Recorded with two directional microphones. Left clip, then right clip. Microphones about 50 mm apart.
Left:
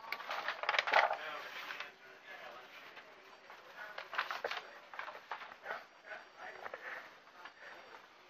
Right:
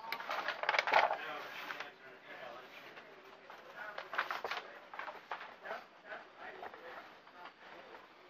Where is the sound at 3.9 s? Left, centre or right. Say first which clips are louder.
Right 1 dB; left.